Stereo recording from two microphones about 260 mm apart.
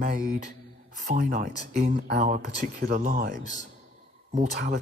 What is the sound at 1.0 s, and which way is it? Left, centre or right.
A man's voice, right.